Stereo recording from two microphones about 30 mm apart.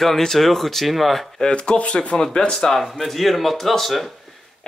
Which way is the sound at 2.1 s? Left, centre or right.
Left.